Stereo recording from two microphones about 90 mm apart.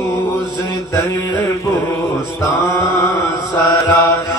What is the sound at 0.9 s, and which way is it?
Mantra, 30° left (ahead or behind).